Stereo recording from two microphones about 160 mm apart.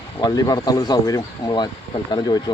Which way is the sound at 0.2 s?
25° left (ahead or behind).